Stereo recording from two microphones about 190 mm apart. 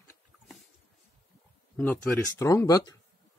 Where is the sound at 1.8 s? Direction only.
5° left (ahead or behind).